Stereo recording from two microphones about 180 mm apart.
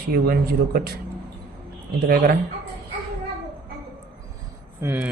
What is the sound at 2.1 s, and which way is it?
Speech, 55° right (ahead or behind).